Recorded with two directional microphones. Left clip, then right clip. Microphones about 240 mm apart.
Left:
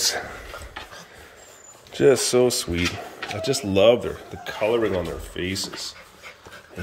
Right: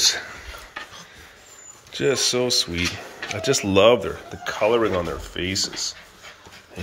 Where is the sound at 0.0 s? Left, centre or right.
Centre.